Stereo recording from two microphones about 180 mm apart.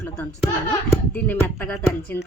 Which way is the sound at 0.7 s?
10° left (ahead or behind).